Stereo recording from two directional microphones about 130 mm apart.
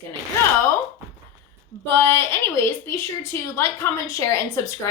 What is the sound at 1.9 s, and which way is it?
A woman's voice, 20° left (ahead or behind).